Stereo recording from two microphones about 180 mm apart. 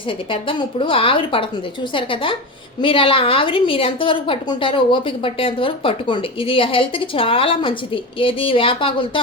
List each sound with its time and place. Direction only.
0.3 s a woman's voice: 30° left (ahead or behind)